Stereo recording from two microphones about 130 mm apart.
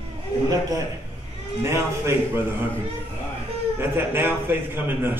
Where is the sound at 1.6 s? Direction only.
20° right (ahead or behind).